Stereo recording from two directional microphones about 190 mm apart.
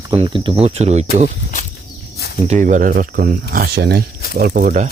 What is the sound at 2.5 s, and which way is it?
Speech, 40° right (ahead or behind).